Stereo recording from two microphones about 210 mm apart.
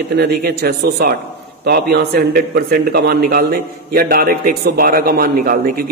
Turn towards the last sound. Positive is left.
turn(degrees=-45)  # may be behind; listen again after turning